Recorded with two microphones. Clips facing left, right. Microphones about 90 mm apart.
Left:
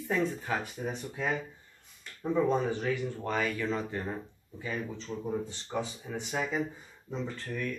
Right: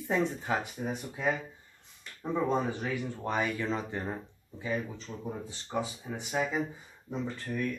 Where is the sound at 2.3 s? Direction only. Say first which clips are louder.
Left 2 dB; 10° right (ahead or behind).